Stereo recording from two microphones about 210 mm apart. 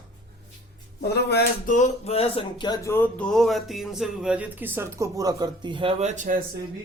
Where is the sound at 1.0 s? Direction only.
50° left (ahead or behind).